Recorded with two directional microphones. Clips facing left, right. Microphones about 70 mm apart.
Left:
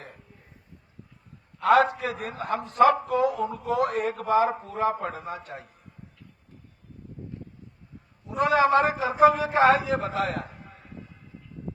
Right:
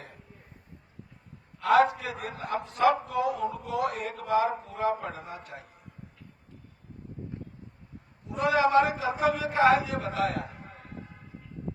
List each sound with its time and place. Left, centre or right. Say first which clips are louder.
1.6 s a man's voice: left 2 dB; left
7.3 s a sound: even; right
8.4 s a man's voice: left 2 dB; left